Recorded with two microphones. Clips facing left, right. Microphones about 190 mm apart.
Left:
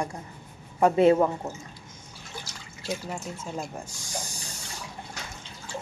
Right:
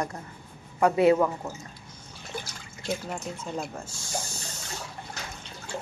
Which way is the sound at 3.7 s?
15° left (ahead or behind).